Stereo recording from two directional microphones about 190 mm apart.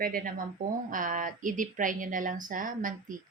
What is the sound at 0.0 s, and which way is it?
Speech, 50° right (ahead or behind).